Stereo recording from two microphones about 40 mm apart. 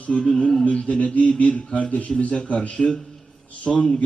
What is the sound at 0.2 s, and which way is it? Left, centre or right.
A man's voice, left.